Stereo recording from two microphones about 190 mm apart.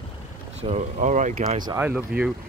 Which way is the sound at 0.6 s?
35° right (ahead or behind).